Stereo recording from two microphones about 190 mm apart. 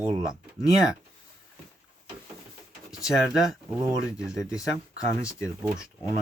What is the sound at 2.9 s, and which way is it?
Speech, centre (ahead or behind).